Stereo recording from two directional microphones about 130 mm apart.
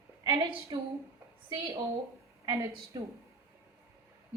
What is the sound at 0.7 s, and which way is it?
Speech, 35° right (ahead or behind).